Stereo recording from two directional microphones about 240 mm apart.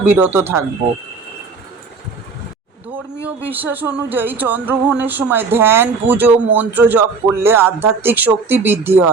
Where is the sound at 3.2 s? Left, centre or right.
Centre.